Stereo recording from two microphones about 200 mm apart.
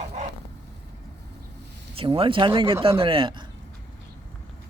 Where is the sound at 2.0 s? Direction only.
25° right (ahead or behind).